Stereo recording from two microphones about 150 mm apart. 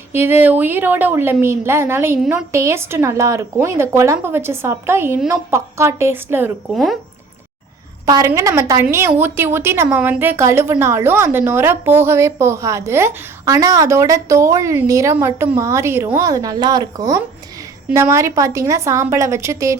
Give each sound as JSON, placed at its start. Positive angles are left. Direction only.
{"t": 0.1, "sound": "a woman's voice", "side_deg": -15}
{"t": 8.0, "sound": "a woman's voice", "side_deg": -25}